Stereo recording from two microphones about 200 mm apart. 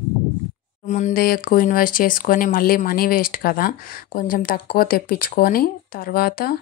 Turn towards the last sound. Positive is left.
turn(degrees=50)  # may be behind; listen again after turning